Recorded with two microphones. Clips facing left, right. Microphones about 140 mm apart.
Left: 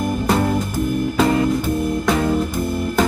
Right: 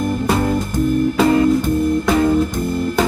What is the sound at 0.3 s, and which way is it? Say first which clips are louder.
Music: left 1 dB; centre (ahead or behind).